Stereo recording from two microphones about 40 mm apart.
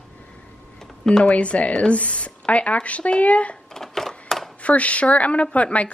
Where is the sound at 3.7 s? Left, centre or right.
Centre.